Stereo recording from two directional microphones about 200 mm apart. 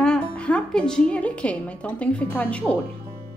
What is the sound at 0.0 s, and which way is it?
Speech, 5° left (ahead or behind).